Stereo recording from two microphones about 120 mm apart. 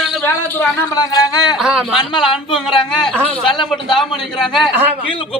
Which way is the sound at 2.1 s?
40° left (ahead or behind).